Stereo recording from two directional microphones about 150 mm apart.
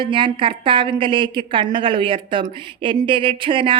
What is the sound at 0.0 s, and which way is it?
Speech, 35° right (ahead or behind).